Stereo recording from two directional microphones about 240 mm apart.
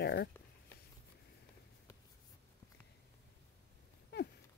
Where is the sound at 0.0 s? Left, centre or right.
Left.